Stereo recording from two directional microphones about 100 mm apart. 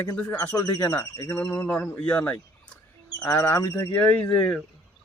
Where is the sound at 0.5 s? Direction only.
35° left (ahead or behind).